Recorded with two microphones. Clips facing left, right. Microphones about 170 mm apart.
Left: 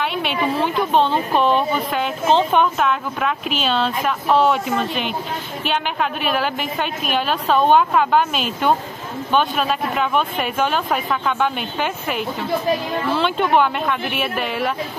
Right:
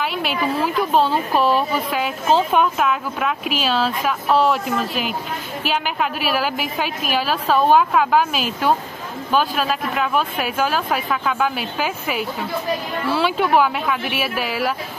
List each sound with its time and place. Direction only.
0.0 s a woman's voice: 5° right (ahead or behind)